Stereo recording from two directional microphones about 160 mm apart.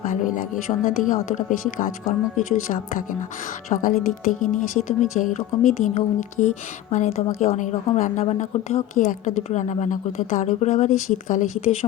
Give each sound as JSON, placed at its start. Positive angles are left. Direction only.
{"t": 0.0, "sound": "speech", "side_deg": 55}